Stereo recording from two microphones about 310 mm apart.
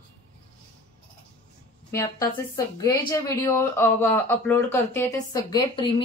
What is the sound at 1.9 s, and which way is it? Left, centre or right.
Speech, centre.